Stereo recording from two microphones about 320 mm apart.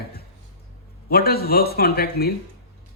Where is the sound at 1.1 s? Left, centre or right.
Left.